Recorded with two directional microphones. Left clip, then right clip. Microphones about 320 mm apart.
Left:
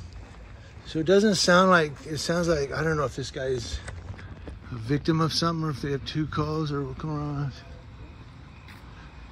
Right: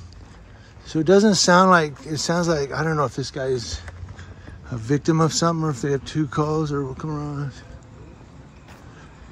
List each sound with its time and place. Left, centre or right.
0.9 s speech: centre